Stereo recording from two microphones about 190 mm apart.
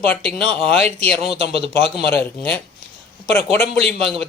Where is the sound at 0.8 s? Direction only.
35° right (ahead or behind).